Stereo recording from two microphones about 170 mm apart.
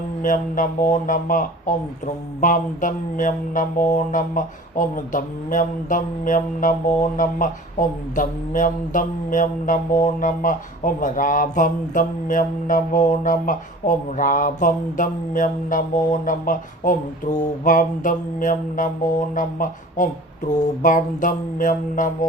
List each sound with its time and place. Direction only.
0.2 s speech: 50° left (ahead or behind)